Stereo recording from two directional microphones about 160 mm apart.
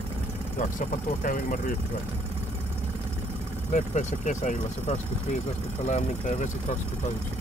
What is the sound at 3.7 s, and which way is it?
Speech, 50° left (ahead or behind).